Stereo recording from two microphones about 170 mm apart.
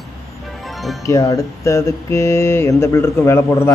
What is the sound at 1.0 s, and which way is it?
Speech, 20° left (ahead or behind).